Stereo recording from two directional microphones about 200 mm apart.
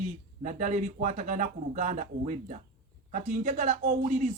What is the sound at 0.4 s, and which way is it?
Speech, 35° right (ahead or behind).